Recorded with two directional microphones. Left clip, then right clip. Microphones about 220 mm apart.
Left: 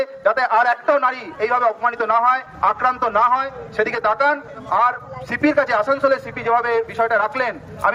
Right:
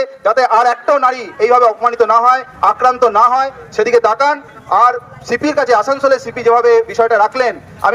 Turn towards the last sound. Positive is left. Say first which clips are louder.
# right 6 dB
turn(degrees=-20)  # may be behind; listen again after turning